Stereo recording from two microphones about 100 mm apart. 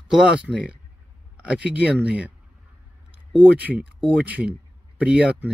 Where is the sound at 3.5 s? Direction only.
15° right (ahead or behind).